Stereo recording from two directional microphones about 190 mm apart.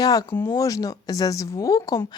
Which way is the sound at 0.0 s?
20° left (ahead or behind).